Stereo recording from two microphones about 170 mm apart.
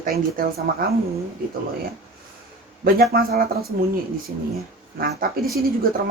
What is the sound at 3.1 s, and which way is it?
Speech, 65° right (ahead or behind).